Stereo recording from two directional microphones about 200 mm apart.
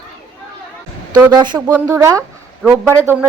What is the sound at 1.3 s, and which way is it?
Speech, 20° right (ahead or behind).